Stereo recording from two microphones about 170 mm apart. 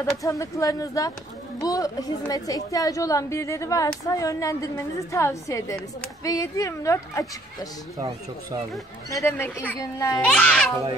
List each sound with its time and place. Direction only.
0.0 s a woman's voice: 20° left (ahead or behind)
9.2 s a child's voice: 10° left (ahead or behind)
10.3 s a child's voice: 5° left (ahead or behind)